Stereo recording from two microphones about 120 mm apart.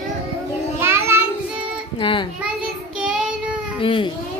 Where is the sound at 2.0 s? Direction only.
45° left (ahead or behind).